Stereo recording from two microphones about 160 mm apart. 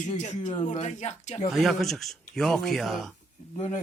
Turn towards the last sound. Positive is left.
turn(degrees=45)  # may be behind; listen again after turning